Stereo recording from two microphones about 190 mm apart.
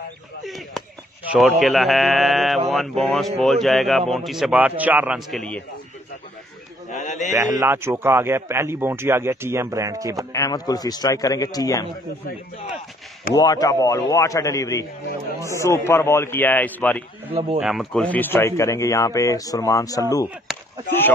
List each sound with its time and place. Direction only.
0.4 s a man's voice: centre (ahead or behind)
6.9 s a sound: 40° left (ahead or behind)
7.3 s a man's voice: 15° right (ahead or behind)
10.3 s a man's voice: 20° left (ahead or behind)
13.3 s speech: 20° left (ahead or behind)
17.3 s speech: 30° right (ahead or behind)
17.6 s speech: centre (ahead or behind); by 20.2 s 20° left (ahead or behind)